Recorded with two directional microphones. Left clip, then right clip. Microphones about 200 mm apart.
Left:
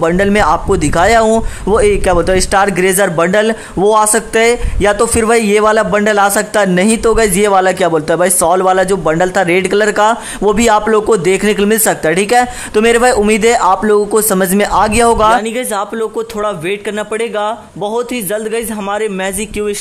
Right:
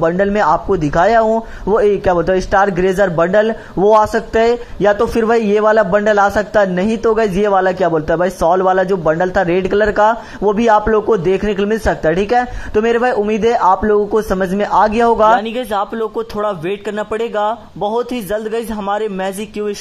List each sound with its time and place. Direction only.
0.0 s a man's voice: 30° left (ahead or behind)